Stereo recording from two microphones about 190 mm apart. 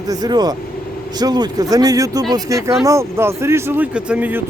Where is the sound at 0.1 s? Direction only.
20° right (ahead or behind).